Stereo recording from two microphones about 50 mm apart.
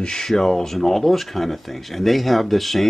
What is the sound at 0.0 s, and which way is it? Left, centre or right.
Speech, centre.